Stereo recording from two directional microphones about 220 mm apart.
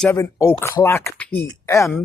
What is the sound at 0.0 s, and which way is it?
Speech, 15° left (ahead or behind).